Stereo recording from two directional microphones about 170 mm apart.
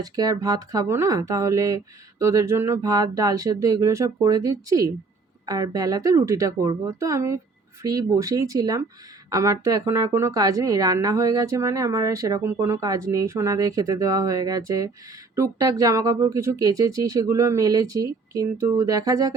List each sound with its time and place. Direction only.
0.0 s speech: 20° right (ahead or behind)